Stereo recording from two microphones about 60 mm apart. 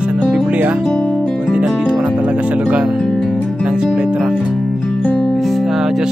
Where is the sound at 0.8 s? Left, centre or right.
Centre.